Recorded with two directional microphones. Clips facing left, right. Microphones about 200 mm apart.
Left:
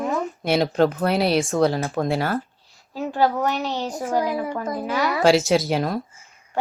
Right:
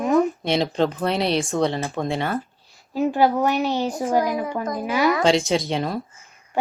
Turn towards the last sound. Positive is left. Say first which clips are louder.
# left 2 dB
turn(degrees=0)  # may be behind; listen again after turning